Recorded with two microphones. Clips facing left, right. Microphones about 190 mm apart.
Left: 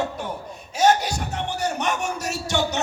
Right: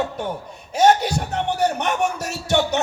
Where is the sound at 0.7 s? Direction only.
60° right (ahead or behind).